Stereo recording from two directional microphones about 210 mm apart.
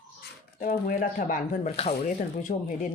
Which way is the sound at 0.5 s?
40° left (ahead or behind).